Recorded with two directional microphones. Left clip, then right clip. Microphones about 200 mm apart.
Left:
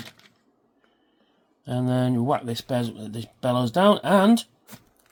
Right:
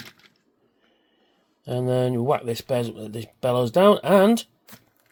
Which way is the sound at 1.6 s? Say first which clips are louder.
Right 3 dB; 25° right (ahead or behind).